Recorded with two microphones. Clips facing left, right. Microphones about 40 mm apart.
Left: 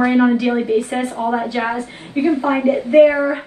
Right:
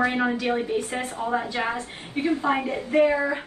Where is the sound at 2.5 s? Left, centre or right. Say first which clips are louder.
Left 9 dB; left.